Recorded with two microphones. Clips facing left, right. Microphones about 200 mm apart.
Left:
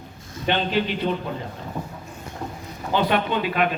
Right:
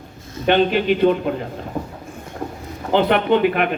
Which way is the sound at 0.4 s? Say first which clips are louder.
Right 7 dB; 55° right (ahead or behind).